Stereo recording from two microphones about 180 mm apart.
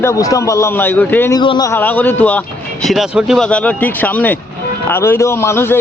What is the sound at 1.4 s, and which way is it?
Speech, 25° left (ahead or behind).